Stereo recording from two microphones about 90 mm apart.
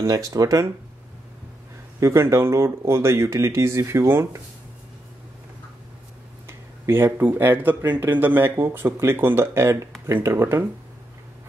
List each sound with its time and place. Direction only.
0.0 s speech: 40° right (ahead or behind)
2.0 s speech: 30° right (ahead or behind)
6.4 s speech: 25° right (ahead or behind)